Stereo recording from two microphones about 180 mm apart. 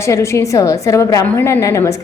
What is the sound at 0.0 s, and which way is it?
A woman's voice, 15° left (ahead or behind).